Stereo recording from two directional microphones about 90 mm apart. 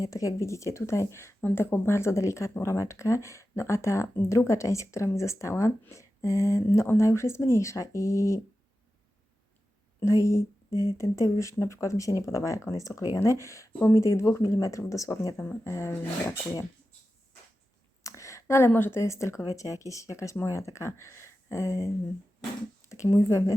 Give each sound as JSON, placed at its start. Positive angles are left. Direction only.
{"t": 0.0, "sound": "speech", "side_deg": 40}
{"t": 1.4, "sound": "speech", "side_deg": 20}
{"t": 10.0, "sound": "speech", "side_deg": 30}
{"t": 18.0, "sound": "speech", "side_deg": 35}
{"t": 22.9, "sound": "speech", "side_deg": 35}